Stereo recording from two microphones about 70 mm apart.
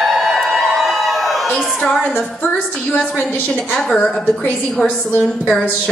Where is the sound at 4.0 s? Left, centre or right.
Left.